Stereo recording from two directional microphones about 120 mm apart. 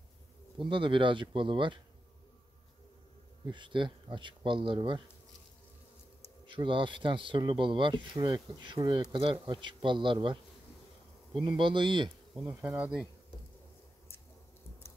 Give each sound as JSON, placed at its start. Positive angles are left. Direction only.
{"t": 0.6, "sound": "speech", "side_deg": -45}
{"t": 3.4, "sound": "speech", "side_deg": -40}
{"t": 6.4, "sound": "speech", "side_deg": -45}
{"t": 11.4, "sound": "speech", "side_deg": -40}
{"t": 12.4, "sound": "speech", "side_deg": -15}